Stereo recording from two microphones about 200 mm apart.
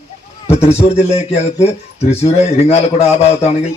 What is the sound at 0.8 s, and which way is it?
A man's voice, 30° left (ahead or behind).